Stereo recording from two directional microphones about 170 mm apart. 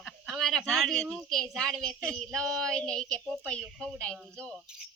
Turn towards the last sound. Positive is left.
turn(degrees=5)  # may be behind; listen again after turning